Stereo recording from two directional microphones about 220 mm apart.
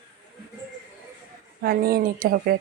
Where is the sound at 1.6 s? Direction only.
45° right (ahead or behind).